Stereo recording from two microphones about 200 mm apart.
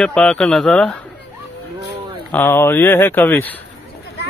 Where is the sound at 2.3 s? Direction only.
10° left (ahead or behind).